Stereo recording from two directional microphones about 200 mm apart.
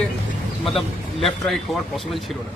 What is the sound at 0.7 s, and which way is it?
Speech, centre (ahead or behind).